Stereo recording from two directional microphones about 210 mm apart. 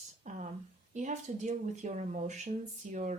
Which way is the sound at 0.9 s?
35° right (ahead or behind).